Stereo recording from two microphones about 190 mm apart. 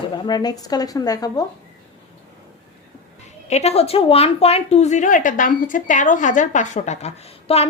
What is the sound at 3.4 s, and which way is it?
Speech, 35° left (ahead or behind).